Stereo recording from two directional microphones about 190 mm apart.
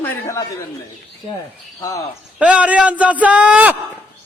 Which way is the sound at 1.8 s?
15° left (ahead or behind).